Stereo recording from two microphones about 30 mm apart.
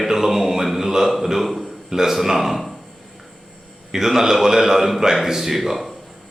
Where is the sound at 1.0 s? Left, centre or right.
Centre.